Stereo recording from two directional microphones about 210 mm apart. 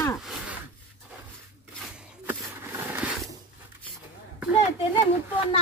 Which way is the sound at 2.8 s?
5° right (ahead or behind).